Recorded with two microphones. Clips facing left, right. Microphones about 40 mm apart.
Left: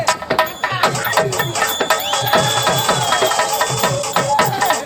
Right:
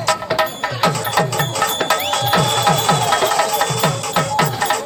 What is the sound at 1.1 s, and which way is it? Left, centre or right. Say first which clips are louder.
Music: left 1 dB; centre.